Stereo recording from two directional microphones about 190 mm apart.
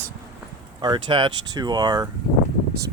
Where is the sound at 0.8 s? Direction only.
25° right (ahead or behind).